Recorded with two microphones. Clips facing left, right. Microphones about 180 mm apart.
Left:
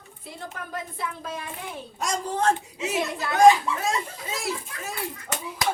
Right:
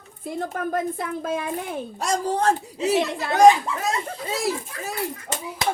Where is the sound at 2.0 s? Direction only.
35° right (ahead or behind).